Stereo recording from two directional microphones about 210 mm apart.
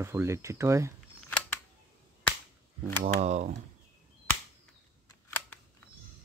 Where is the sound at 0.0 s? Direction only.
10° right (ahead or behind).